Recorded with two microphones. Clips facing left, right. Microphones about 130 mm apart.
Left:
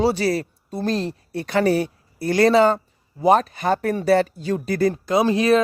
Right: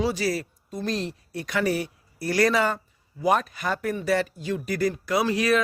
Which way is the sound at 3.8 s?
50° left (ahead or behind).